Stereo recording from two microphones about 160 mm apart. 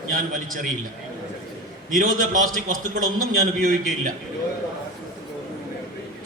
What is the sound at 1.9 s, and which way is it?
A man's voice, 55° right (ahead or behind).